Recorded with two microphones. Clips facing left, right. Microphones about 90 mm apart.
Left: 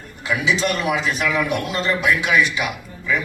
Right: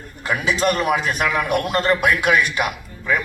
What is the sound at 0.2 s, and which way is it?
A man's voice, 45° right (ahead or behind).